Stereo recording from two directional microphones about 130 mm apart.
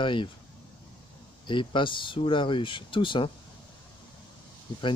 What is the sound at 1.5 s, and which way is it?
Speech, 40° left (ahead or behind).